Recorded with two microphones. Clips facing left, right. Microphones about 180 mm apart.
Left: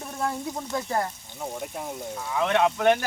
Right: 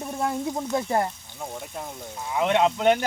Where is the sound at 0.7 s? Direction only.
25° right (ahead or behind).